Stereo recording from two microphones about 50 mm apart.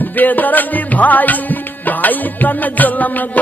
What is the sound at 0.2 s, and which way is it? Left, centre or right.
Music, left.